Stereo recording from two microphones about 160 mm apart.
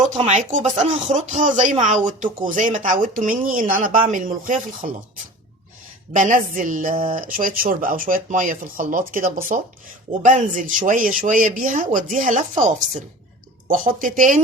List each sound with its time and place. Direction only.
0.2 s speech: 45° right (ahead or behind)
6.1 s speech: 55° right (ahead or behind)